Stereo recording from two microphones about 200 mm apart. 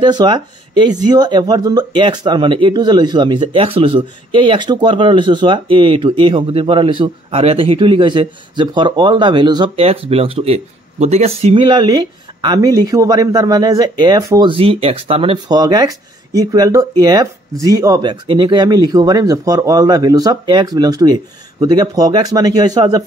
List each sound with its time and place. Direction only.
0.0 s speech: 20° right (ahead or behind)